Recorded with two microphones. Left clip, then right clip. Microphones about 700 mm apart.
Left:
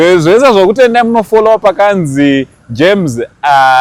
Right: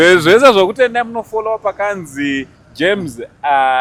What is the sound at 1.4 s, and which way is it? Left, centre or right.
Speech, left.